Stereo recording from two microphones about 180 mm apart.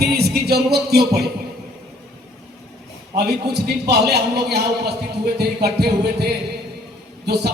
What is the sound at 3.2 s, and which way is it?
A man's voice, 65° right (ahead or behind).